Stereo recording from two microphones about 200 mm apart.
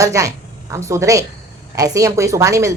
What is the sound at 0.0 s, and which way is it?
A woman's voice, 15° right (ahead or behind).